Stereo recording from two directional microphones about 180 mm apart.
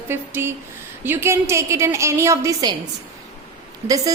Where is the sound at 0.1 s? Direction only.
15° right (ahead or behind).